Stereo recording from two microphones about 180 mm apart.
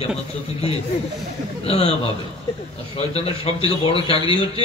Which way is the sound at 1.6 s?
35° left (ahead or behind).